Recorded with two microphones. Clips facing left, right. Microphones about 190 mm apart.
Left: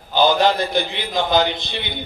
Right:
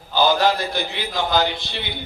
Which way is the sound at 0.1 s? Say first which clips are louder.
Left 2 dB; 20° left (ahead or behind).